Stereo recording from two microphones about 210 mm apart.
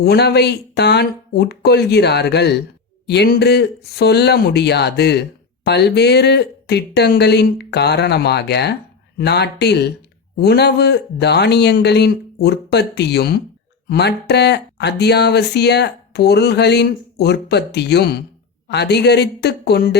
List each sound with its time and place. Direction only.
0.0 s speech: 50° left (ahead or behind)